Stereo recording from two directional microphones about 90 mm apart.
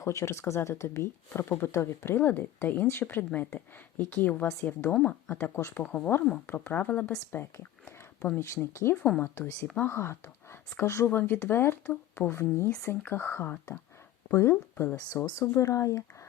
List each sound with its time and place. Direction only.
0.0 s speech: 35° left (ahead or behind)
5.8 s speech: 10° left (ahead or behind)
6.5 s speech: 20° left (ahead or behind)
7.3 s a sound: 25° left (ahead or behind)
8.7 s speech: 30° left (ahead or behind)
14.5 s speech: 15° left (ahead or behind)
15.1 s speech: 35° left (ahead or behind)